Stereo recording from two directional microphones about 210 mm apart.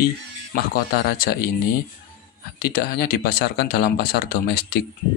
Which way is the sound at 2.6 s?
45° left (ahead or behind).